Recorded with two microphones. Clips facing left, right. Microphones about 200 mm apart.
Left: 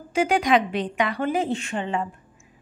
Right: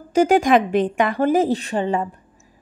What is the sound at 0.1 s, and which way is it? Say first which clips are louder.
A woman's voice: right 5 dB; 45° right (ahead or behind).